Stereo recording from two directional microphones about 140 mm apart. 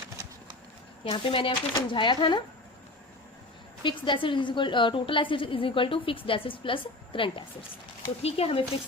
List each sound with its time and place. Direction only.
1.0 s a woman's voice: 40° left (ahead or behind)
3.8 s a woman's voice: 35° left (ahead or behind)